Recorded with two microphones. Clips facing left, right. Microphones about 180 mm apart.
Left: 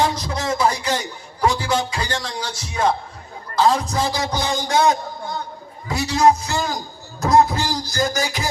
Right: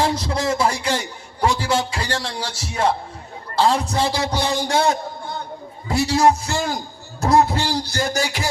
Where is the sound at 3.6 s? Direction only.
30° right (ahead or behind).